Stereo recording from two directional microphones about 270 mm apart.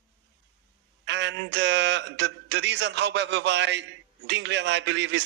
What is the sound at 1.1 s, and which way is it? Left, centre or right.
Speech, right.